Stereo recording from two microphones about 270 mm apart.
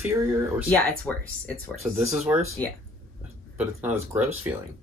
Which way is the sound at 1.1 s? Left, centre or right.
Centre.